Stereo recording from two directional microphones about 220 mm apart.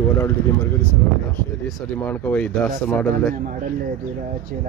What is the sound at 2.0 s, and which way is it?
Speech, 5° left (ahead or behind).